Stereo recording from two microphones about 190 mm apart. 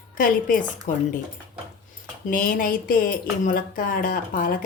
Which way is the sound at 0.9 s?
45° left (ahead or behind).